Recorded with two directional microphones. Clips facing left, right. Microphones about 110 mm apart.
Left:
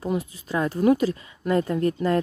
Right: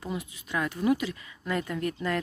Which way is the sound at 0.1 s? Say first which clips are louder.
Left 6 dB; 35° left (ahead or behind).